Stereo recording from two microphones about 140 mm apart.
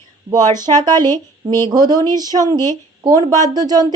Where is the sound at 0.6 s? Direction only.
30° right (ahead or behind).